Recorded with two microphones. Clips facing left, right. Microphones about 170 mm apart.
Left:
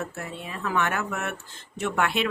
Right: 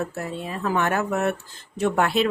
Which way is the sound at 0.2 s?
35° right (ahead or behind).